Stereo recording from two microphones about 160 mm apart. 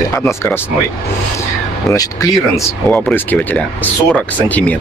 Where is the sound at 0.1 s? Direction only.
15° left (ahead or behind).